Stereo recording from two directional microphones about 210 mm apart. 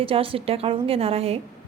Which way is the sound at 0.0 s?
25° right (ahead or behind).